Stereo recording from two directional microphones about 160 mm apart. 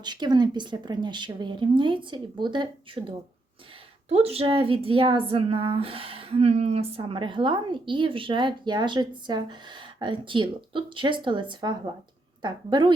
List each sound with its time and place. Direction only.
0.0 s a woman's voice: 25° right (ahead or behind)
4.1 s a woman's voice: 40° right (ahead or behind)